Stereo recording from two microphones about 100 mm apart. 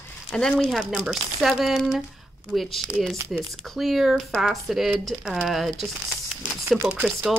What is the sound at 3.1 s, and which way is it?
Speech, 30° right (ahead or behind).